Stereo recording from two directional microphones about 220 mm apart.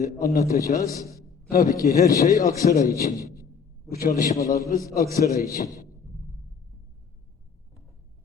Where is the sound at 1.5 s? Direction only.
40° left (ahead or behind).